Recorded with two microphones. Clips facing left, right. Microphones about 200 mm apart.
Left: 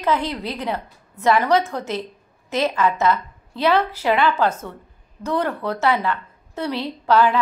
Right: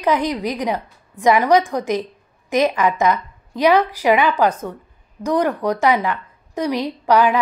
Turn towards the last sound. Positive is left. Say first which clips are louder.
# right 2 dB
turn(degrees=-15)  # may be behind; listen again after turning